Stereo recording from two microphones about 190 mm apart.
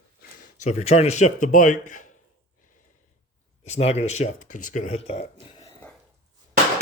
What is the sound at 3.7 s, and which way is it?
Speech, 35° left (ahead or behind).